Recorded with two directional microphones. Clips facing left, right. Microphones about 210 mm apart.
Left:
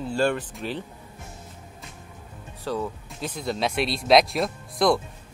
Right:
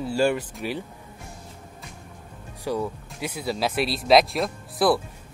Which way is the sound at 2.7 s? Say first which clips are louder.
Right 2 dB; 10° right (ahead or behind).